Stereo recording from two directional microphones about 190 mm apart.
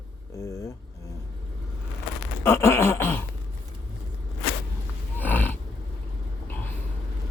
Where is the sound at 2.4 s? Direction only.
15° left (ahead or behind).